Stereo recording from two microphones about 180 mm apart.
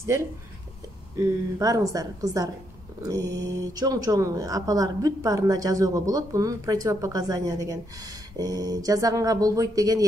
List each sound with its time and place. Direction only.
1.1 s a woman's voice: 15° right (ahead or behind)